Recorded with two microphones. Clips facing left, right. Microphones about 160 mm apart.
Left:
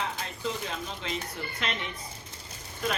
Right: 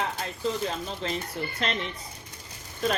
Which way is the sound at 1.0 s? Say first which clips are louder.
Right 5 dB; 40° right (ahead or behind).